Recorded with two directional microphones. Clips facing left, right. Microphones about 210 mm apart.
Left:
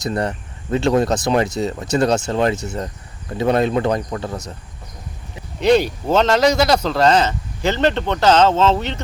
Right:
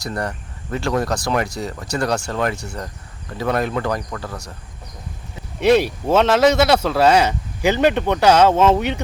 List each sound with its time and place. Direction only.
0.0 s speech: 20° left (ahead or behind)
5.5 s speech: 5° right (ahead or behind)